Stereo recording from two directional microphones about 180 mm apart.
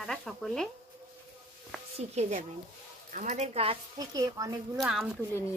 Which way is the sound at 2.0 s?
40° right (ahead or behind).